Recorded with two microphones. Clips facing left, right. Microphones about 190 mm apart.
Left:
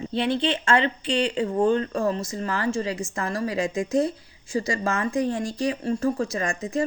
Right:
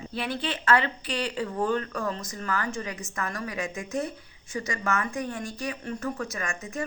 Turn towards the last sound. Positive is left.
turn(degrees=35)  # may be behind; listen again after turning